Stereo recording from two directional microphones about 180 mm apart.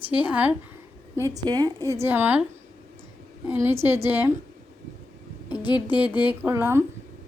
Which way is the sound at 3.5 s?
15° right (ahead or behind).